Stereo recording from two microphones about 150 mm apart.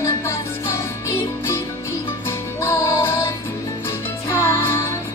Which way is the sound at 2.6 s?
20° left (ahead or behind).